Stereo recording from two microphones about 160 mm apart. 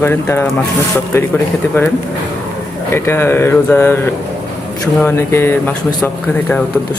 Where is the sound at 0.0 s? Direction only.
15° left (ahead or behind).